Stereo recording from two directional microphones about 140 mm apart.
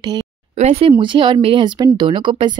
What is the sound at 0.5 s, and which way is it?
Speech, 50° right (ahead or behind).